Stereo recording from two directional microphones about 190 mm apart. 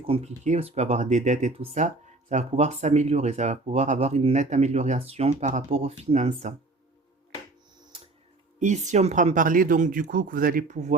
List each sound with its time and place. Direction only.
0.1 s speech: 35° right (ahead or behind)
8.5 s speech: 40° right (ahead or behind)